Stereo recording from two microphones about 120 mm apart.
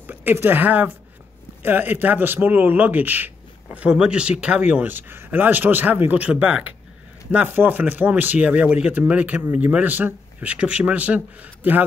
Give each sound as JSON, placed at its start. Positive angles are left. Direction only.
{"t": 0.0, "sound": "speech", "side_deg": -15}